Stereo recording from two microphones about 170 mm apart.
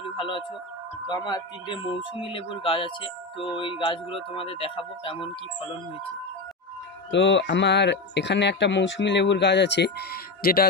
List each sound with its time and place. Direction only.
0.2 s speech: 30° left (ahead or behind)
7.1 s speech: 90° left; by 10.7 s 65° left (ahead or behind)